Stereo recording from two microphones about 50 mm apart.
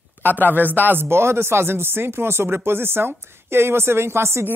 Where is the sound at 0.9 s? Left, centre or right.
Right.